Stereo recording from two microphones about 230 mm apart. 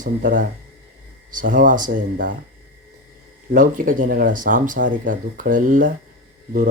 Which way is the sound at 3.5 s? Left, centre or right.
Right.